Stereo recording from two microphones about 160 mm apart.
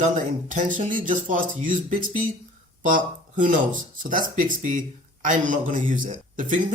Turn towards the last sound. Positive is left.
turn(degrees=-50)  # may be behind; listen again after turning